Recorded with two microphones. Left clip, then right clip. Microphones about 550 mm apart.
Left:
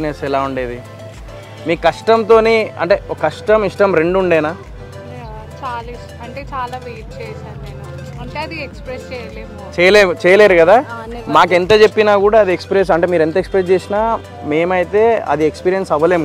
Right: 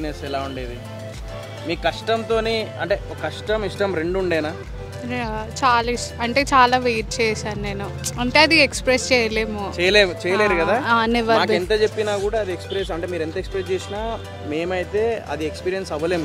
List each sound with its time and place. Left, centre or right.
0.0 s speech: left
1.7 s speech: centre
5.1 s speech: right
9.8 s speech: centre
10.9 s speech: right
11.3 s speech: left